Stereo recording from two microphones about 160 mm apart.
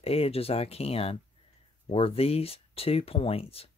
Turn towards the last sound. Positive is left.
turn(degrees=35)  # may be behind; listen again after turning